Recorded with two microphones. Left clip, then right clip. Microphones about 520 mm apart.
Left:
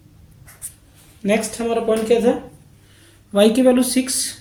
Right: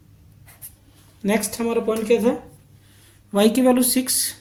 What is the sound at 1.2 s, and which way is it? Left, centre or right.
Speech, right.